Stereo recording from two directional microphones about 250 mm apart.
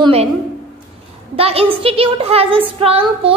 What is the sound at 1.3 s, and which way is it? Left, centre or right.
A woman's voice, right.